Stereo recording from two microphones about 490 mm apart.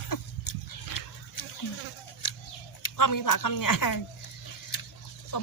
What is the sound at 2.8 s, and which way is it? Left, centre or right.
Speech, left.